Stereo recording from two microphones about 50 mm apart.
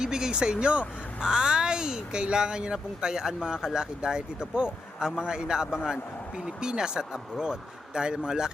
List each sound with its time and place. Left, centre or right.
0.0 s speech: centre